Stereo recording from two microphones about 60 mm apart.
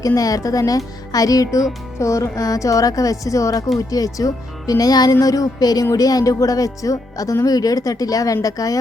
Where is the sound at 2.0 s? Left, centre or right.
Left.